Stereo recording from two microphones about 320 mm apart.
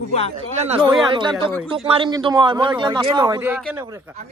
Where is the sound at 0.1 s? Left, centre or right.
Centre.